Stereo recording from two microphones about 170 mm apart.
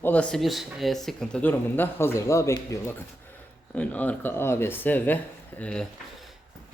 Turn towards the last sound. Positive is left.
turn(degrees=10)  # may be behind; listen again after turning